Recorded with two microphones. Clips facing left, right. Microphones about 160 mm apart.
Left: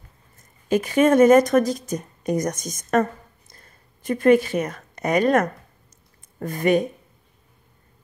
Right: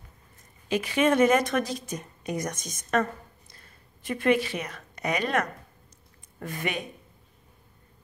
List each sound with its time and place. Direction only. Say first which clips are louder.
0.7 s a woman's voice: left 6 dB; 45° left (ahead or behind)